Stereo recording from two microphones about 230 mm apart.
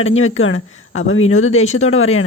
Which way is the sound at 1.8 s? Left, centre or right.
Left.